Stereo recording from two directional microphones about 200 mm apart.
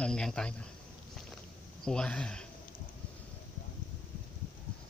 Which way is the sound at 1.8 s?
5° left (ahead or behind).